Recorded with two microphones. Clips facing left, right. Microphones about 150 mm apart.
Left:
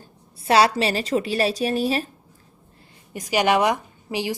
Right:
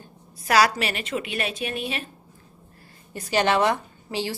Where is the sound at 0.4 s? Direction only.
25° left (ahead or behind).